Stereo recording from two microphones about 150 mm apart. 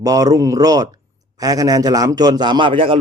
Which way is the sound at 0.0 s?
25° right (ahead or behind).